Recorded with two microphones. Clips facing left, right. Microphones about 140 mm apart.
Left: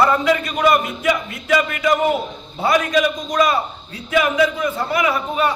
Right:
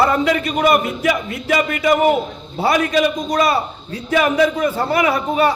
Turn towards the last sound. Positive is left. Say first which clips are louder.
# right 3 dB
turn(degrees=-35)  # may be behind; listen again after turning